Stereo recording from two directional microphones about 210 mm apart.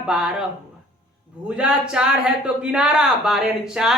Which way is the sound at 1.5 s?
5° right (ahead or behind).